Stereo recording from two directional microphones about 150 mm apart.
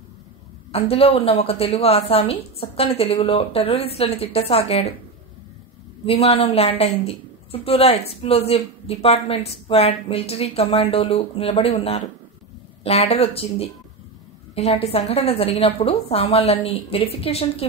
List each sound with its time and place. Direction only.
0.7 s a woman's voice: 40° left (ahead or behind)
6.0 s a woman's voice: 40° left (ahead or behind)